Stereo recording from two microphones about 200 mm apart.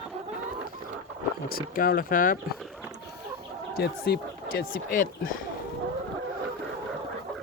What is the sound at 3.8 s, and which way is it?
Speech, 55° left (ahead or behind).